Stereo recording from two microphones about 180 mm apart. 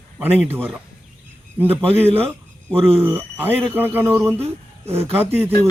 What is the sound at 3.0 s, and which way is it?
Speech, 10° right (ahead or behind).